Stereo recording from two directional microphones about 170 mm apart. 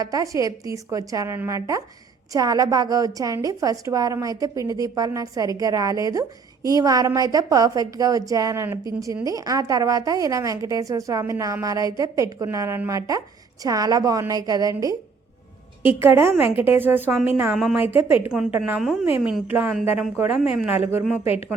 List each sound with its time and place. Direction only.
0.0 s a woman's voice: 20° right (ahead or behind)